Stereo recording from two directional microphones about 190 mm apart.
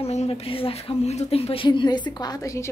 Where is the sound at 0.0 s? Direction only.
35° left (ahead or behind).